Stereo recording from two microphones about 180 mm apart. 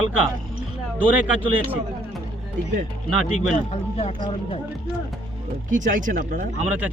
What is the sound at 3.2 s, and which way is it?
Speech, 35° left (ahead or behind).